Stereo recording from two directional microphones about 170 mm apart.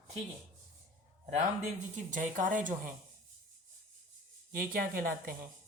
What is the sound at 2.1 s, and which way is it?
Speech, 50° right (ahead or behind).